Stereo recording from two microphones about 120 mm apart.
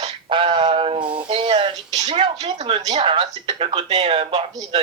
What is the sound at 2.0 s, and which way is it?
Speech, 60° right (ahead or behind).